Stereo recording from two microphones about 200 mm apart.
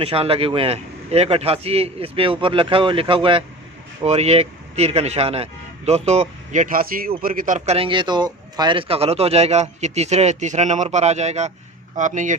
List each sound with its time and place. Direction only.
0.0 s a man's voice: 30° right (ahead or behind)